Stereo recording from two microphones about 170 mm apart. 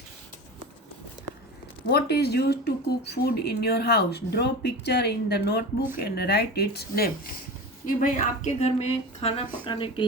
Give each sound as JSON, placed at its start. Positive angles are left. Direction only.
{"t": 1.9, "sound": "speech", "side_deg": 70}
{"t": 7.9, "sound": "a woman's voice", "side_deg": 50}